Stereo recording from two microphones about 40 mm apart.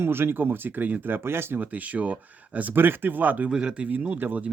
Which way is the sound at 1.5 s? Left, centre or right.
Right.